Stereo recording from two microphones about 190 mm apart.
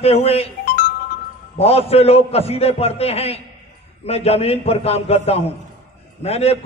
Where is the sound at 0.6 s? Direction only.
50° left (ahead or behind).